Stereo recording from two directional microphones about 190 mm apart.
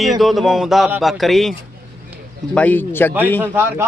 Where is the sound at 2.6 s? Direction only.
10° left (ahead or behind).